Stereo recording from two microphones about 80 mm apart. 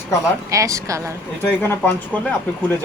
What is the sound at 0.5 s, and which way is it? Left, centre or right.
Speech, right.